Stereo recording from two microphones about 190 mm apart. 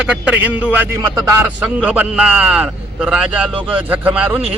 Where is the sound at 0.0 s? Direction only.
5° right (ahead or behind).